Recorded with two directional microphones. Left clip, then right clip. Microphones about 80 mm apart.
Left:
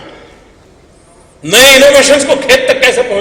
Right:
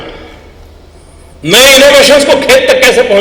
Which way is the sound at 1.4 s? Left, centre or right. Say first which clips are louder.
Right 1 dB; right.